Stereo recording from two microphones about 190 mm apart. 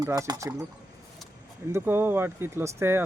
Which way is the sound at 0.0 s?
20° right (ahead or behind).